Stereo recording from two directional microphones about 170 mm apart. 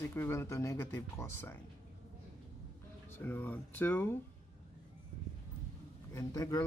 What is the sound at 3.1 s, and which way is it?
Speech, 10° left (ahead or behind).